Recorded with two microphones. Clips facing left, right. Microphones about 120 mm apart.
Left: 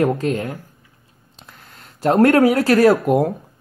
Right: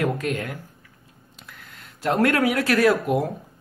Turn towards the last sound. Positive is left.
turn(degrees=45)  # may be behind; listen again after turning